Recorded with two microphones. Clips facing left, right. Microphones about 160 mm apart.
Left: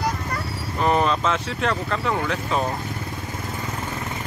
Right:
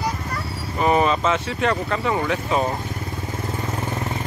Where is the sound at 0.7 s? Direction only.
5° right (ahead or behind).